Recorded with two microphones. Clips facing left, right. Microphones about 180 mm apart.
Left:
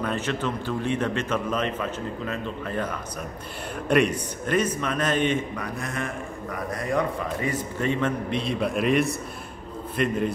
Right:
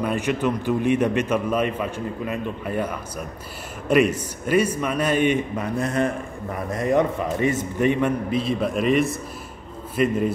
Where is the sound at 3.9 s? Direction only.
5° right (ahead or behind).